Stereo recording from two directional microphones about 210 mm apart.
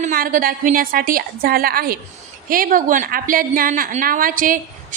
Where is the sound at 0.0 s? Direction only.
40° right (ahead or behind).